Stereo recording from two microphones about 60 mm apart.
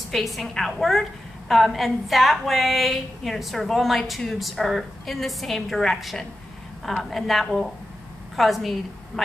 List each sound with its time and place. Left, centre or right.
0.1 s a woman's voice: centre